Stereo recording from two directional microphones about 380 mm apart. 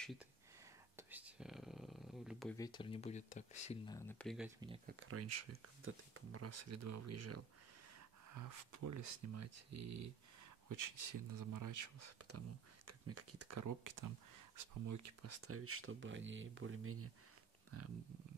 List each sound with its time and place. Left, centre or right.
0.9 s speech: centre
4.8 s speech: right
8.3 s speech: right
10.7 s speech: right